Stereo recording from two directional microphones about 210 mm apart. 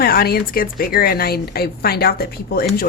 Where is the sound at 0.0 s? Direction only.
45° left (ahead or behind).